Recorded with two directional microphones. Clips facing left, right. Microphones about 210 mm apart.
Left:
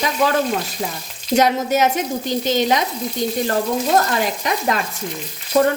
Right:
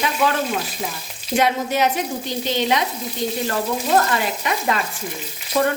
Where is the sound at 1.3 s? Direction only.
45° left (ahead or behind).